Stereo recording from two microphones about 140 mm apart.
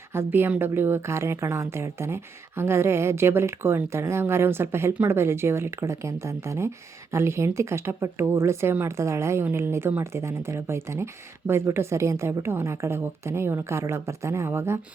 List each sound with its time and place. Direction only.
0.1 s a woman's voice: 15° right (ahead or behind)